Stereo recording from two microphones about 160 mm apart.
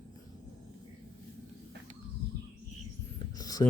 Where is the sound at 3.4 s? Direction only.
20° left (ahead or behind).